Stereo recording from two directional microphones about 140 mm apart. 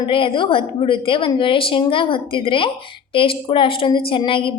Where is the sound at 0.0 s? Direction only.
40° left (ahead or behind).